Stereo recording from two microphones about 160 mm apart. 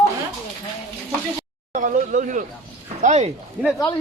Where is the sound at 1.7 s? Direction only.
55° right (ahead or behind).